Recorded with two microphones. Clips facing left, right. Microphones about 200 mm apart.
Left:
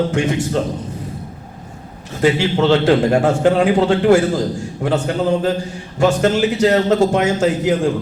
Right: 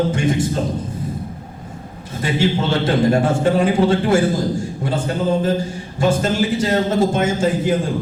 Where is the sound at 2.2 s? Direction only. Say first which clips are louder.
Left 4 dB; 70° left (ahead or behind).